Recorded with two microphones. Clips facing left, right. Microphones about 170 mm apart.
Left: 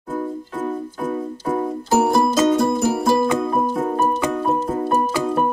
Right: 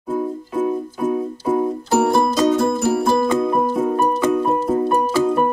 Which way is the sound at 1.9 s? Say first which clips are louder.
Left 1 dB; 5° left (ahead or behind).